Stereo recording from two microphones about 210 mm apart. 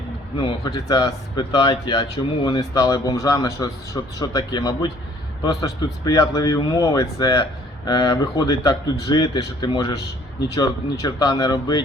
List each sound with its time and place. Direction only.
0.3 s speech: 20° left (ahead or behind)